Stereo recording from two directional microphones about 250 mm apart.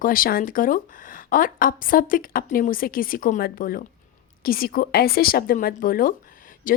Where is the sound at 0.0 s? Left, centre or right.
Left.